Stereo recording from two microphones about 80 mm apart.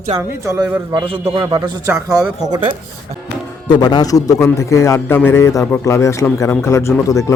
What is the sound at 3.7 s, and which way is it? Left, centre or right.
A man's voice, left.